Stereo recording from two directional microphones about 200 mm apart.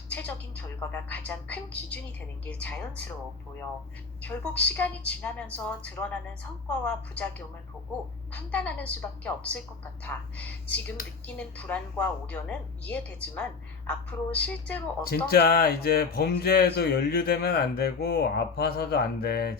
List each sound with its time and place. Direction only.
0.1 s a woman's voice: 5° left (ahead or behind)
4.2 s a woman's voice: 5° left (ahead or behind)
15.1 s speech: 50° left (ahead or behind)